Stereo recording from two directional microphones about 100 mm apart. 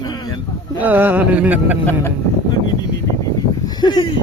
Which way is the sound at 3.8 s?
50° left (ahead or behind).